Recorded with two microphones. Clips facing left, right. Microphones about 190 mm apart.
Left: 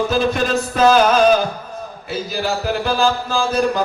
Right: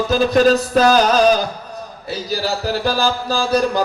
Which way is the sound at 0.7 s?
35° right (ahead or behind).